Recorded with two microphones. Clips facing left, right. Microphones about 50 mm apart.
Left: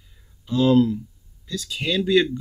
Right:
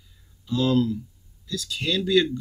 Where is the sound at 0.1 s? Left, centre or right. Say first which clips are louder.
Left 3 dB; centre.